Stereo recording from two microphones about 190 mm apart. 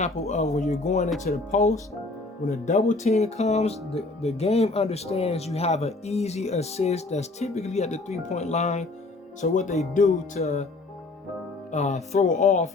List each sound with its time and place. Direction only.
0.0 s speech: 35° left (ahead or behind)
11.7 s speech: 40° left (ahead or behind)